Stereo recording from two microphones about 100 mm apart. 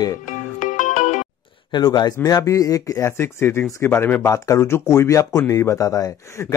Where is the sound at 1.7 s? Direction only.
45° left (ahead or behind).